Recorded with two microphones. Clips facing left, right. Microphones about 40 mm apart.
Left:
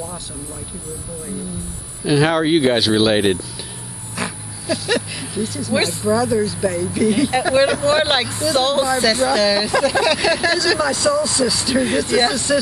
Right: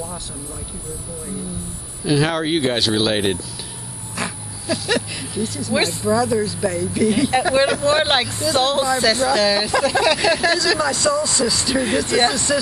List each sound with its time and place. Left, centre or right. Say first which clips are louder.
2.0 s speech: left 3 dB; centre